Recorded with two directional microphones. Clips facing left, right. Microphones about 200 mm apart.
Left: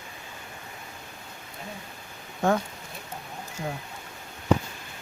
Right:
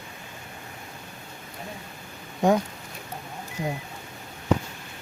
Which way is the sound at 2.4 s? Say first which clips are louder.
Right 3 dB; 15° right (ahead or behind).